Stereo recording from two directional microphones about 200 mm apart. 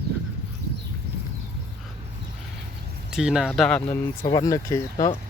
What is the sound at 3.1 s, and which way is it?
Speech, 5° right (ahead or behind).